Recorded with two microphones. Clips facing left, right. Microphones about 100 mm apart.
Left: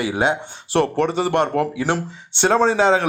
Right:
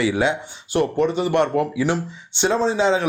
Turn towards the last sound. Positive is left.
turn(degrees=55)  # may be behind; listen again after turning